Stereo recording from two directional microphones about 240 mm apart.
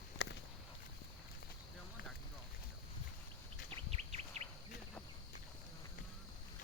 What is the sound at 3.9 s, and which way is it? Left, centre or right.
Bird, right.